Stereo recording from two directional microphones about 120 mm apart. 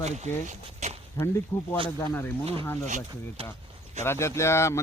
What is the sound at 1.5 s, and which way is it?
Speech, 15° left (ahead or behind).